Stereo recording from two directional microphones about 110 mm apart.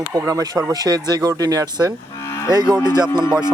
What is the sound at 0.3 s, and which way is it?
Speech, 30° right (ahead or behind).